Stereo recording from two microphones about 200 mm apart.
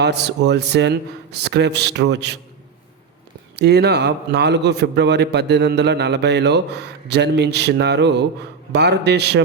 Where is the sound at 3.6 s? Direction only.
55° right (ahead or behind).